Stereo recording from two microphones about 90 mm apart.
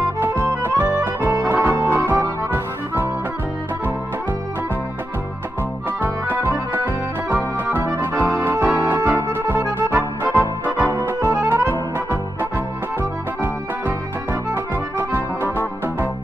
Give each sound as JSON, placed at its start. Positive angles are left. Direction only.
{"t": 0.2, "sound": "accordion", "side_deg": -25}
{"t": 1.5, "sound": "music", "side_deg": -25}
{"t": 5.9, "sound": "music", "side_deg": -25}
{"t": 14.5, "sound": "accordion", "side_deg": -25}